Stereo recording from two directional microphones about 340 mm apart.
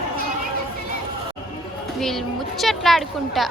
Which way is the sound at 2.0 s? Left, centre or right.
Centre.